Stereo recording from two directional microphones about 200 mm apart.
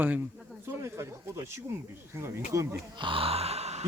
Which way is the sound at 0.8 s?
15° right (ahead or behind).